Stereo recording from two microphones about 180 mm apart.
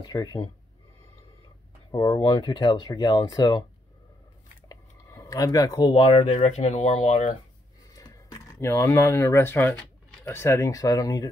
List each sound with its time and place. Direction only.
0.0 s speech: 20° left (ahead or behind)
1.9 s speech: 20° left (ahead or behind)
4.6 s speech: 15° left (ahead or behind); by 7.3 s 40° left (ahead or behind)
7.9 s speech: 20° left (ahead or behind)